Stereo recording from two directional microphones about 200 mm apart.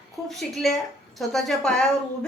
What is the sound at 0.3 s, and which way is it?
A woman's voice, centre (ahead or behind).